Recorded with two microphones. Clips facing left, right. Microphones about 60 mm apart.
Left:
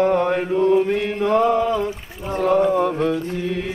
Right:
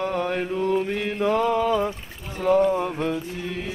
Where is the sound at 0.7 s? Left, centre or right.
Centre.